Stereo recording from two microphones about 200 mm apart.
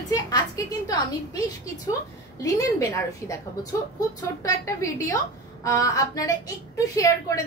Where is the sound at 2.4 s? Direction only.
15° left (ahead or behind).